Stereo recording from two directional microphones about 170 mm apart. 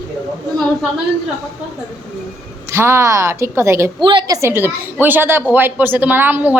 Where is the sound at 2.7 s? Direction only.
15° right (ahead or behind).